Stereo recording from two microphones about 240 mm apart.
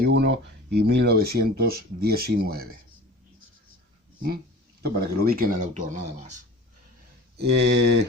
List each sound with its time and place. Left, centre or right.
0.0 s a sound: right
0.8 s speech: right
4.8 s speech: right
7.3 s mantra: right